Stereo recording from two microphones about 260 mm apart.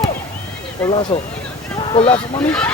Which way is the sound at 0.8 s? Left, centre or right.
Centre.